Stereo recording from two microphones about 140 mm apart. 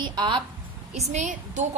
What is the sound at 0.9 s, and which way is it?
Speech, 55° right (ahead or behind).